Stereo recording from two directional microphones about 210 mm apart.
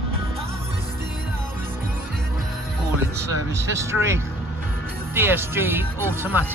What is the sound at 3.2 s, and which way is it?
Speech, 10° right (ahead or behind).